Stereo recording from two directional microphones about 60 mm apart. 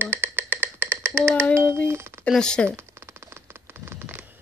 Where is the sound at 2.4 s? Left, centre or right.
Centre.